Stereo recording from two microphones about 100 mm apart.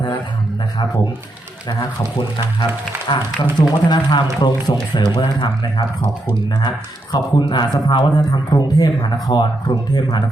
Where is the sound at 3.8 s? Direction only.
45° left (ahead or behind).